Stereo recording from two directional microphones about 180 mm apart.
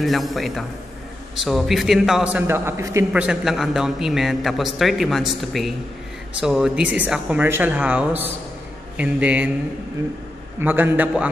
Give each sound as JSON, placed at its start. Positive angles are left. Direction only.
{"t": 0.0, "sound": "a man's voice", "side_deg": 0}
{"t": 10.6, "sound": "speech", "side_deg": -10}